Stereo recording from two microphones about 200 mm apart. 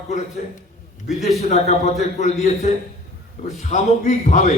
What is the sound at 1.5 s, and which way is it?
Speech, 35° left (ahead or behind).